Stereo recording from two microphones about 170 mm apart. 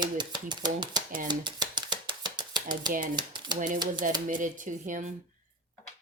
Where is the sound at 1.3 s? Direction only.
25° right (ahead or behind).